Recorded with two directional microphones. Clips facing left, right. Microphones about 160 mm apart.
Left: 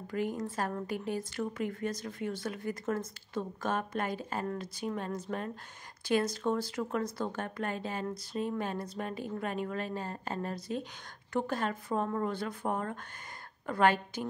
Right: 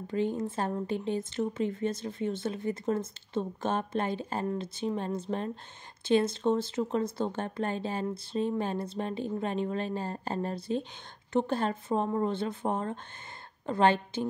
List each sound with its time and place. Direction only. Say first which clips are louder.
0.0 s speech: right 4 dB; 25° right (ahead or behind)